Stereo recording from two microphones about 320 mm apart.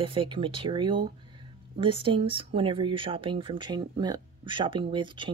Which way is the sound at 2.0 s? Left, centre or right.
Centre.